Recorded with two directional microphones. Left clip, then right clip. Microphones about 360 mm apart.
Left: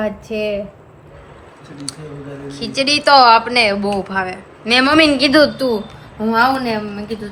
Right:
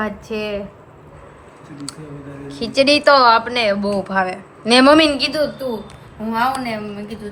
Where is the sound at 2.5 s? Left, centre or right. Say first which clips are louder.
Right 3 dB; centre.